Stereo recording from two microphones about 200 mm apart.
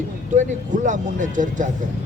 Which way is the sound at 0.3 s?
40° right (ahead or behind).